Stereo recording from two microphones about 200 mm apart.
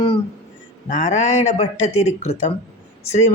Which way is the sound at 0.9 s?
40° left (ahead or behind).